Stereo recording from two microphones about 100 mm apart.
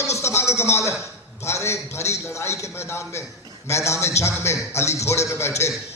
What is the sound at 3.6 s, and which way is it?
A man's voice, 30° left (ahead or behind).